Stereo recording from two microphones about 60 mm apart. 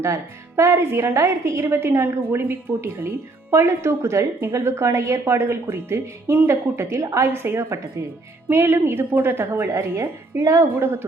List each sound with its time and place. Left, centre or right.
0.0 s speech: right
0.8 s speech: right
10.8 s speech: right